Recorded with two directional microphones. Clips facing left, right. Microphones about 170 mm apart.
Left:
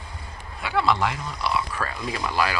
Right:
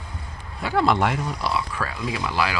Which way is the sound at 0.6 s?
45° right (ahead or behind).